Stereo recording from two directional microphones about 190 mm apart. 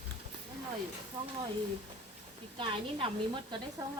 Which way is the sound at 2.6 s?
30° right (ahead or behind).